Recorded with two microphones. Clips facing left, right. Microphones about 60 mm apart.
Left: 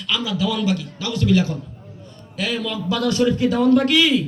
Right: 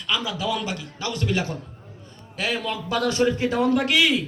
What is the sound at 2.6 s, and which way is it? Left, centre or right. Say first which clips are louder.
A man's voice: left 3 dB; right.